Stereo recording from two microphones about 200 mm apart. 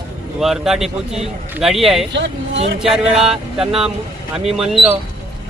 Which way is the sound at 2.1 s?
60° right (ahead or behind).